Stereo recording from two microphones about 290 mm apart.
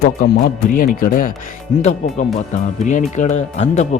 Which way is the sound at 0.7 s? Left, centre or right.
Left.